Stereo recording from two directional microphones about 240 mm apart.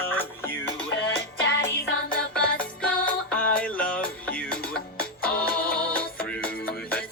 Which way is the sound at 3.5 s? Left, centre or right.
Centre.